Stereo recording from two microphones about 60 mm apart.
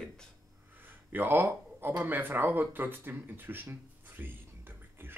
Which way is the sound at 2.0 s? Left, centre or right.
Right.